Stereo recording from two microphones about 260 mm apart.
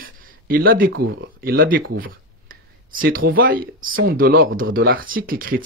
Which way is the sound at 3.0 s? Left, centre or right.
Right.